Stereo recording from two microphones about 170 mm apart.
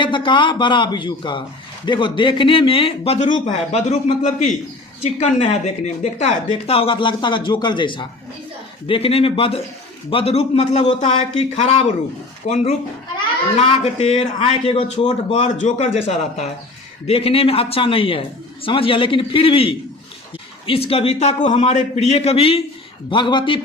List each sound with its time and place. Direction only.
0.0 s a man's voice: 30° left (ahead or behind)
13.8 s a man's voice: 35° left (ahead or behind)
17.1 s a man's voice: 35° left (ahead or behind)